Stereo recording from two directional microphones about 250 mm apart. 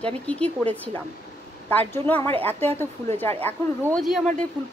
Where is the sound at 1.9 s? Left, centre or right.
Centre.